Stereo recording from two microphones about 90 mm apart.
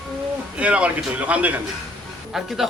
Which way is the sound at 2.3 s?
5° right (ahead or behind).